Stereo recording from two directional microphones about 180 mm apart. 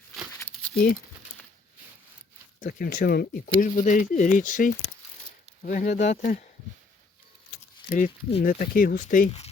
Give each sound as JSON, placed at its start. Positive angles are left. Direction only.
{"t": 2.6, "sound": "speech", "side_deg": 50}
{"t": 7.9, "sound": "speech", "side_deg": 45}